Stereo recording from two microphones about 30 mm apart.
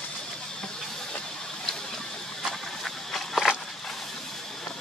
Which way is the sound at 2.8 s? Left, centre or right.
Centre.